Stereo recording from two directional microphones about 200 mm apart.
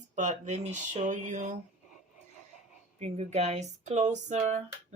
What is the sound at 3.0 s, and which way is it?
Speech, 30° right (ahead or behind).